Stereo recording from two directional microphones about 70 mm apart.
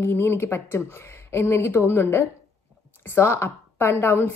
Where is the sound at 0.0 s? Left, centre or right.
Left.